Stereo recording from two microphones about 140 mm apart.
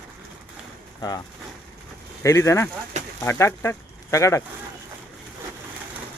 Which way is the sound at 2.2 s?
20° left (ahead or behind).